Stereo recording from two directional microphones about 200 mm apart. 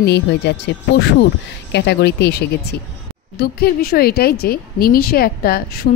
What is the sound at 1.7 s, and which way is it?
Speech, 55° left (ahead or behind).